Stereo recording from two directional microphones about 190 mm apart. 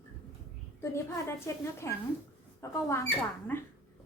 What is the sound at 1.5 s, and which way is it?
A woman's voice, 15° left (ahead or behind).